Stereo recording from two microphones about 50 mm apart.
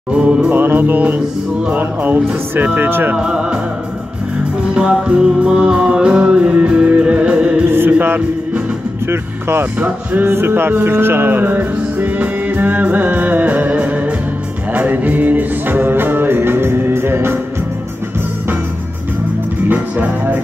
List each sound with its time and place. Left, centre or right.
0.1 s music: centre
0.5 s music: right
2.5 s speech: right
3.2 s music: centre
4.7 s music: centre
7.7 s music: right
9.0 s speech: right
10.2 s music: right
19.7 s music: right